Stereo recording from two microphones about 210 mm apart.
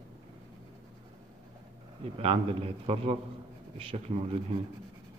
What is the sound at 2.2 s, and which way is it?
A man's voice, 25° right (ahead or behind).